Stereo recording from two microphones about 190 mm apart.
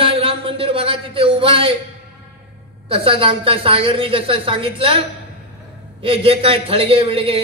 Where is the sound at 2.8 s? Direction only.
30° right (ahead or behind).